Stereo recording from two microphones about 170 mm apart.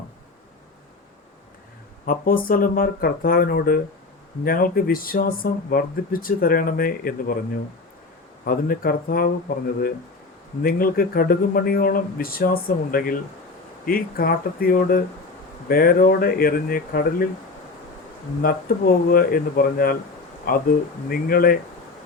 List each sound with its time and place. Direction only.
2.0 s speech: 55° left (ahead or behind)
10.6 s speech: 60° left (ahead or behind)
18.4 s speech: 60° left (ahead or behind)